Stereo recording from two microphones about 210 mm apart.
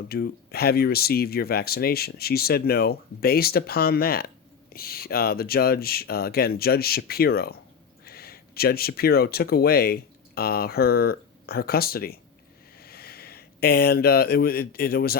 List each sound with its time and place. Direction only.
0.1 s speech: 50° left (ahead or behind)